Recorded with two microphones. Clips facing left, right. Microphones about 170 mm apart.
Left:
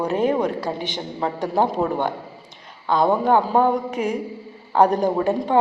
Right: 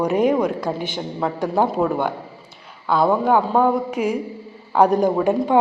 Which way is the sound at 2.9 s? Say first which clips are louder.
Right 1 dB; 10° right (ahead or behind).